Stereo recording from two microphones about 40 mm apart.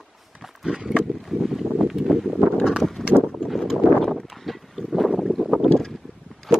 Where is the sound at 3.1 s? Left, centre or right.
Right.